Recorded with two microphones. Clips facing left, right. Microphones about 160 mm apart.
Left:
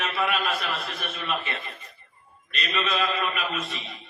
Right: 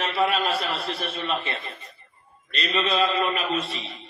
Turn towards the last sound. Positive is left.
turn(degrees=-30)  # may be behind; listen again after turning